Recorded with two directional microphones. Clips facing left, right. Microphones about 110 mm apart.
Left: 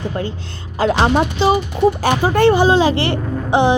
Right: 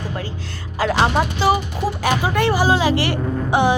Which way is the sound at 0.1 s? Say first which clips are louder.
Left 5 dB; 30° left (ahead or behind).